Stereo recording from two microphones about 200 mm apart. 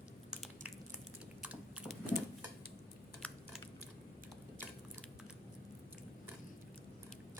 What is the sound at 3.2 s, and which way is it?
Typing, 5° left (ahead or behind).